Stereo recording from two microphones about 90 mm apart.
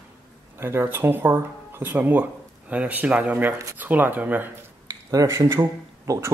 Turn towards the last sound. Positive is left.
turn(degrees=-30)  # may be behind; listen again after turning